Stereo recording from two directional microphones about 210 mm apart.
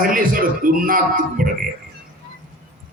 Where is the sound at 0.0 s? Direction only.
40° right (ahead or behind).